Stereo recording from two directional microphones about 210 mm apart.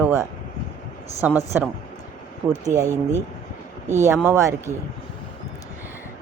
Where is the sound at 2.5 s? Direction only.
15° right (ahead or behind).